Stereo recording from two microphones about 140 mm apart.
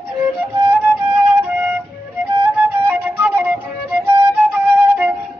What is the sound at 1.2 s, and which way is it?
Flute, 10° right (ahead or behind).